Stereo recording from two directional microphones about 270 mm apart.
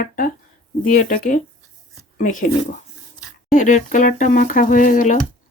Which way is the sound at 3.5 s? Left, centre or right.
Left.